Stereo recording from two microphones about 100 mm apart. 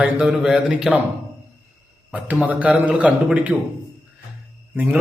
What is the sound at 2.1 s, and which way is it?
A man's voice, 15° right (ahead or behind).